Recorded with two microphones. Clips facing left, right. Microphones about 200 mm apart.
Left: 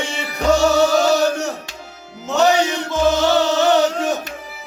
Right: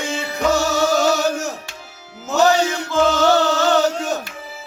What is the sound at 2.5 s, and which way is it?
Chant, 20° left (ahead or behind).